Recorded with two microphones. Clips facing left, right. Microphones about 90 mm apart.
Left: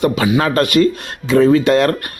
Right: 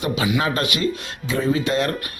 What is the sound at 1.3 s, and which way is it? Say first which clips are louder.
Speech: left 10 dB; 65° left (ahead or behind).